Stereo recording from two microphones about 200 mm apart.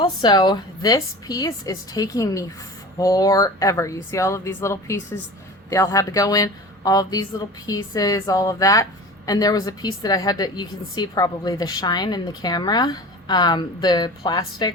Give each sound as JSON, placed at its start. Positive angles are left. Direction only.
{"t": 0.0, "sound": "a woman's voice", "side_deg": 20}